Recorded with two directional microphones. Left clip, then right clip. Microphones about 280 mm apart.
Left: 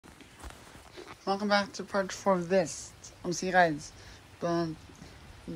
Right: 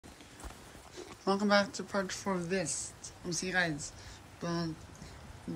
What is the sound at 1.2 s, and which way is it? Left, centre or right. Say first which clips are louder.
Speech: even; centre.